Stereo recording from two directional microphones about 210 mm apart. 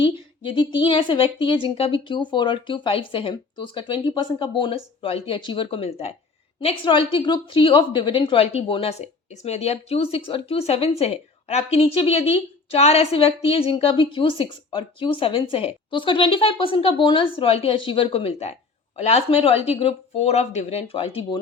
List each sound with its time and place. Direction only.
0.4 s a woman's voice: 25° left (ahead or behind)